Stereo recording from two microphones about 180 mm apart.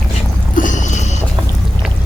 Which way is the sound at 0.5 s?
45° left (ahead or behind).